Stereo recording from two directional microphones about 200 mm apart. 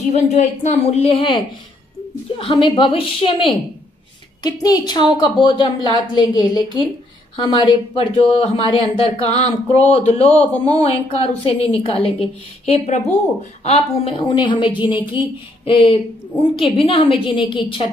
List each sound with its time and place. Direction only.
0.1 s a woman's voice: 35° left (ahead or behind)